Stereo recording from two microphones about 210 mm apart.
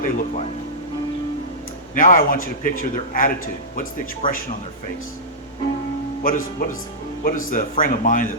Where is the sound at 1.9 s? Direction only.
40° left (ahead or behind).